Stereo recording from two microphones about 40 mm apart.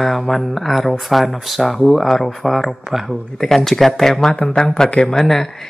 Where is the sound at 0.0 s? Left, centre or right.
Centre.